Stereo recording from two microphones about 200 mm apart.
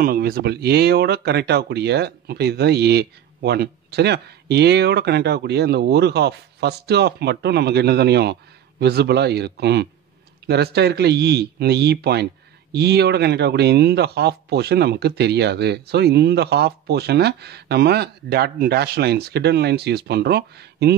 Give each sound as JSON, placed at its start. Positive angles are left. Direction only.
{"t": 0.0, "sound": "speech", "side_deg": -50}